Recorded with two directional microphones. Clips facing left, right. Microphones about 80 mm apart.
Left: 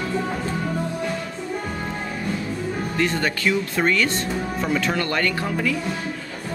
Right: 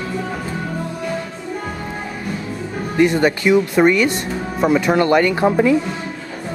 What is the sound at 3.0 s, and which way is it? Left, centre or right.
Speech, centre.